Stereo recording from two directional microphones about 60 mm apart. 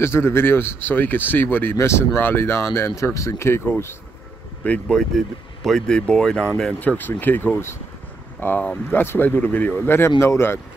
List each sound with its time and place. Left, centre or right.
0.0 s speech: left
1.8 s speech: left
3.0 s speech: left
4.6 s speech: left
4.9 s speech: centre
6.8 s speech: left
10.1 s speech: left